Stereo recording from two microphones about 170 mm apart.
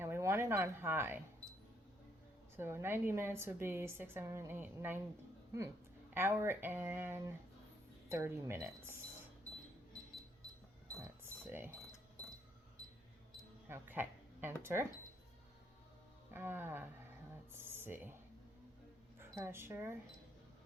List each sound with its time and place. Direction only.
0.0 s speech: 15° right (ahead or behind)
2.6 s a woman's voice: 15° right (ahead or behind)
6.1 s a woman's voice: 15° right (ahead or behind)
11.2 s a sound: 15° right (ahead or behind)
13.7 s speech: 10° right (ahead or behind)
16.3 s a woman's voice: 10° right (ahead or behind)
17.5 s a sound: 15° right (ahead or behind)
19.2 s speech: 15° right (ahead or behind)